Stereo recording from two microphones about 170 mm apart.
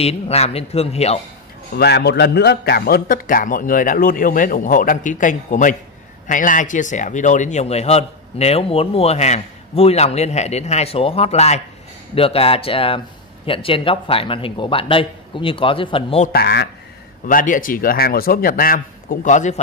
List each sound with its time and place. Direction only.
0.0 s speech: 35° left (ahead or behind)
1.8 s a man's voice: 75° left (ahead or behind); by 16.2 s 30° left (ahead or behind)
16.3 s speech: 65° left (ahead or behind)
17.3 s a man's voice: 55° left (ahead or behind)